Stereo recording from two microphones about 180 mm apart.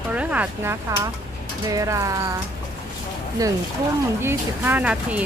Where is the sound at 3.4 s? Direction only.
20° right (ahead or behind).